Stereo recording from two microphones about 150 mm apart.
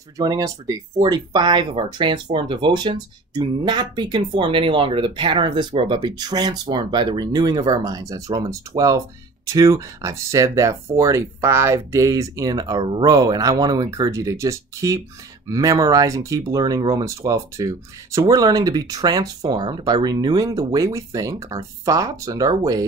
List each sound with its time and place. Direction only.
0.2 s speech: 25° right (ahead or behind)